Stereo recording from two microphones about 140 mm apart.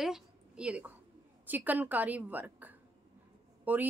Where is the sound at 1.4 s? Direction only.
10° right (ahead or behind).